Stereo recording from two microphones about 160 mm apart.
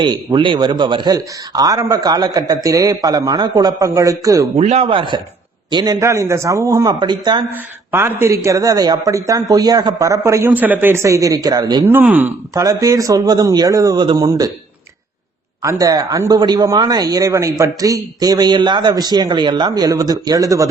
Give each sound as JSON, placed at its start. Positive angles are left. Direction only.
{"t": 0.0, "sound": "a man's voice", "side_deg": -30}
{"t": 4.5, "sound": "a man's voice", "side_deg": -40}
{"t": 7.5, "sound": "a man's voice", "side_deg": -15}
{"t": 11.9, "sound": "a man's voice", "side_deg": -10}
{"t": 15.6, "sound": "a man's voice", "side_deg": -25}